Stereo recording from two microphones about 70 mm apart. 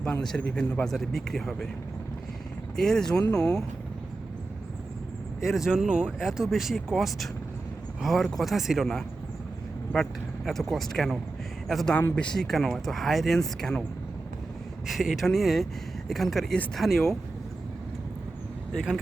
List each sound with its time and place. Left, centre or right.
0.0 s speech: centre
0.9 s speech: centre
2.7 s speech: centre
5.4 s speech: centre
9.9 s speech: centre
14.8 s speech: centre